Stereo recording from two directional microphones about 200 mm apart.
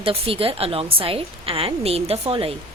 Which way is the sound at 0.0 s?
25° right (ahead or behind).